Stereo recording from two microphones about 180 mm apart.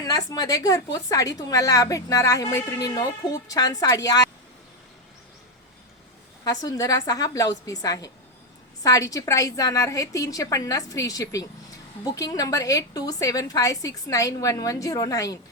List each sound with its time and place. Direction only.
0.1 s a woman's voice: 20° left (ahead or behind)
6.4 s a woman's voice: 20° left (ahead or behind)